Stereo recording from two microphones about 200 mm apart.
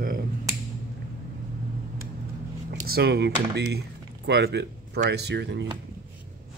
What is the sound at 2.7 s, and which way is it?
Speech, 50° right (ahead or behind).